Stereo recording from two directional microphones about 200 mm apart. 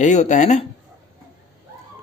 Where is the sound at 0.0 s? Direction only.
35° left (ahead or behind).